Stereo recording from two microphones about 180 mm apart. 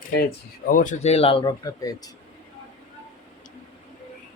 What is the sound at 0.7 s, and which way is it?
A man's voice, 45° left (ahead or behind).